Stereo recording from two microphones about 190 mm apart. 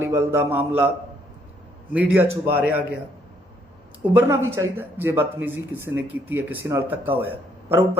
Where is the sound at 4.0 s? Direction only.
10° right (ahead or behind).